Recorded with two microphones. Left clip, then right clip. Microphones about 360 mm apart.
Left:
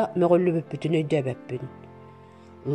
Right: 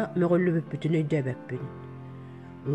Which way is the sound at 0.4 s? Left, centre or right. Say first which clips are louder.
Left 3 dB; centre.